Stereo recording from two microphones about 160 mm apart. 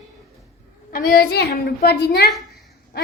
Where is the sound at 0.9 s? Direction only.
65° left (ahead or behind); by 2.3 s 90° left.